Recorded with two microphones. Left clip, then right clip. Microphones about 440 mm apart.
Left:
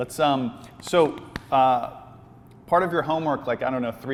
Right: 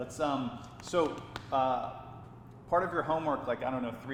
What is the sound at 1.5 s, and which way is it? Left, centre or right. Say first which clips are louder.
A man's voice: left 11 dB; left.